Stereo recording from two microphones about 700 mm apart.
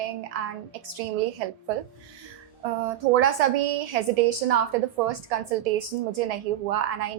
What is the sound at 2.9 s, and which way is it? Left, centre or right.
A woman's voice, right.